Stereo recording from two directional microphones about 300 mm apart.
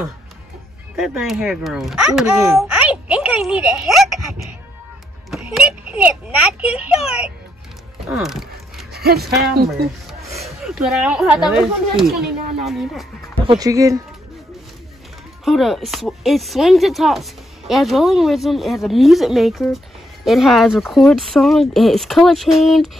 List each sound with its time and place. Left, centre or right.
0.9 s speech: centre
5.3 s a child's voice: centre
8.1 s a sound: centre
8.9 s a sound: right
9.4 s speech: right
10.6 s speech: centre
13.5 s speech: centre
15.4 s speech: centre